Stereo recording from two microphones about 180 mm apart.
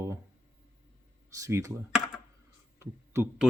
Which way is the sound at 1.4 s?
15° right (ahead or behind).